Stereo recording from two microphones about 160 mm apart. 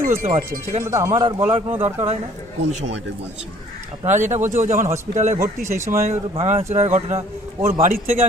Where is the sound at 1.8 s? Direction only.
40° right (ahead or behind).